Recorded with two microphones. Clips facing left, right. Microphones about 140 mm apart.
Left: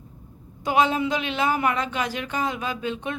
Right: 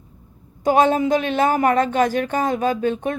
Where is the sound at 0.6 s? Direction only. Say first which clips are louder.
Right 5 dB; 45° right (ahead or behind).